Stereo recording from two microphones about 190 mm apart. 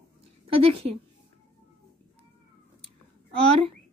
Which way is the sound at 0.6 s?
30° right (ahead or behind).